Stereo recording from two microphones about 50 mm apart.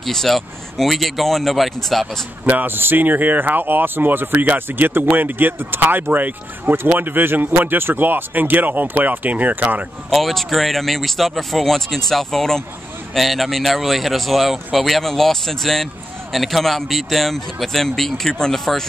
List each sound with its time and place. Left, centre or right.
0.0 s speech: centre
2.4 s speech: right
10.0 s speech: centre